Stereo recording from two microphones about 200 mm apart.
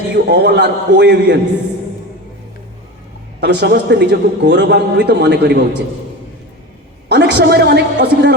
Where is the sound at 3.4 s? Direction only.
60° right (ahead or behind).